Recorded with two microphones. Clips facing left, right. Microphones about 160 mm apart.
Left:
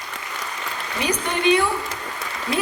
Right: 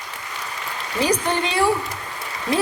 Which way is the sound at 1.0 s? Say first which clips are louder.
Right 4 dB; 35° right (ahead or behind).